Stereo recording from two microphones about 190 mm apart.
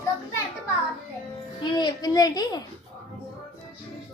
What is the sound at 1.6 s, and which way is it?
Speech, 25° left (ahead or behind).